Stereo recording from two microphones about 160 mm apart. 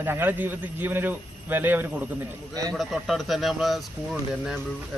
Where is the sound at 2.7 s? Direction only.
Centre (ahead or behind).